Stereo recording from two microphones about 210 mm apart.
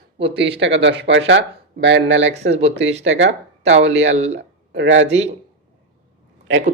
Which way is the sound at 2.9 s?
30° right (ahead or behind).